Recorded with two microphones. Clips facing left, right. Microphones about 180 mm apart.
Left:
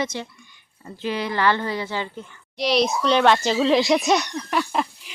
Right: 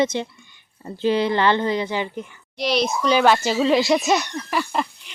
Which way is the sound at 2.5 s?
Centre (ahead or behind).